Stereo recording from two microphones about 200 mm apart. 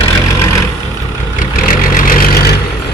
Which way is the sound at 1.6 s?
45° left (ahead or behind).